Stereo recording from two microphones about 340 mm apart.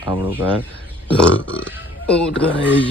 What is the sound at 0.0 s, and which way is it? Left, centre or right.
Speech, centre.